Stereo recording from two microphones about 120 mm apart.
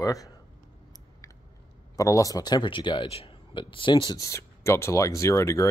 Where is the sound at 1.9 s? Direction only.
25° left (ahead or behind).